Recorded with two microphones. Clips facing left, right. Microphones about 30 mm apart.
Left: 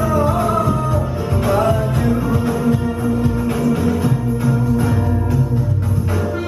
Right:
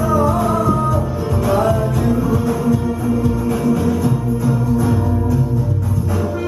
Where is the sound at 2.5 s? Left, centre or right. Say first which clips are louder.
Even; left.